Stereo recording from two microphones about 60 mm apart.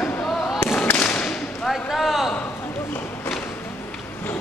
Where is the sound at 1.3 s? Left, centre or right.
Centre.